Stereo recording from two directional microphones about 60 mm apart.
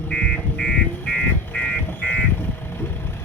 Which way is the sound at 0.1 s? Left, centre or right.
Centre.